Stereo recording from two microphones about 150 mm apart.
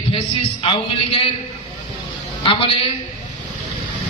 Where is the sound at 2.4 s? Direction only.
35° left (ahead or behind).